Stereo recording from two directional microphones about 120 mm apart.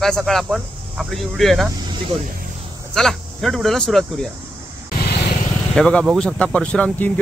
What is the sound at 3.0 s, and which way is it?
Speech, centre (ahead or behind).